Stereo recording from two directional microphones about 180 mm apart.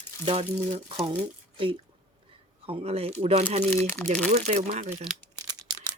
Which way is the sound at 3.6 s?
10° left (ahead or behind).